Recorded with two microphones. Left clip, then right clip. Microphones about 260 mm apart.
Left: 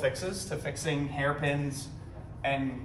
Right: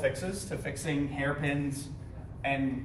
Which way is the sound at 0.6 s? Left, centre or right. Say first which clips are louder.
Even; centre.